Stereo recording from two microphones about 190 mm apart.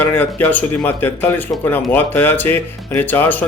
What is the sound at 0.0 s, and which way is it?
Speech, 10° left (ahead or behind).